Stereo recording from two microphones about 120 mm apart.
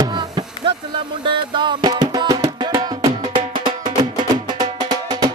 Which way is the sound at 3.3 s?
45° right (ahead or behind).